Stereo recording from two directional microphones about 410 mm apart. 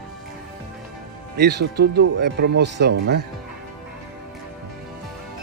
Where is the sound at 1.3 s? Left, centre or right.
Right.